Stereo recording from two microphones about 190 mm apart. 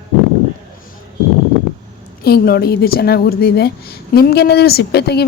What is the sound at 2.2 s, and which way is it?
Speech, 55° left (ahead or behind).